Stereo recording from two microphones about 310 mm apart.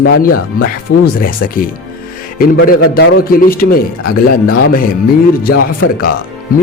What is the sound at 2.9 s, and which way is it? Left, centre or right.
Speech, left.